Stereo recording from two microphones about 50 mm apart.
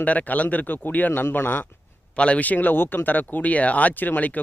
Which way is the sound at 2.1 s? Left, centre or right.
Left.